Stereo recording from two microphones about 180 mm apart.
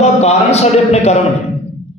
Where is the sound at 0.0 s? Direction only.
40° left (ahead or behind).